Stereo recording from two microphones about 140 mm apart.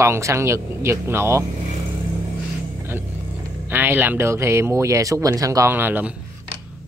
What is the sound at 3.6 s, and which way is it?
Speech, 15° right (ahead or behind).